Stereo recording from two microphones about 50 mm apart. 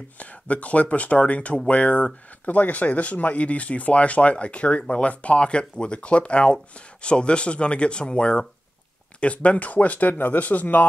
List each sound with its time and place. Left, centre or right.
0.2 s speech: left